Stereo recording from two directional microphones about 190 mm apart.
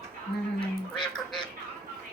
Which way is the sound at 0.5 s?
25° left (ahead or behind).